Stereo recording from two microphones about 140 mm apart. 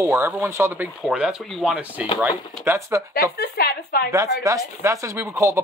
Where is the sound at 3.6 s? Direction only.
90° left.